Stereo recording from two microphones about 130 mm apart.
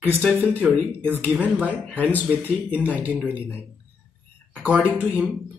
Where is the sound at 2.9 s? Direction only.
10° right (ahead or behind).